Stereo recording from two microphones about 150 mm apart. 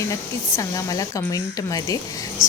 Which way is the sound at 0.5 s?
20° left (ahead or behind).